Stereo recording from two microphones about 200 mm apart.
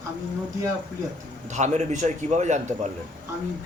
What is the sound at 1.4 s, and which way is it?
Speech, 35° right (ahead or behind).